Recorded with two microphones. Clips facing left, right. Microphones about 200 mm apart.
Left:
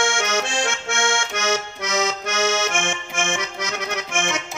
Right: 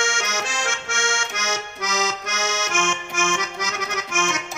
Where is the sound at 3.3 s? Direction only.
30° left (ahead or behind).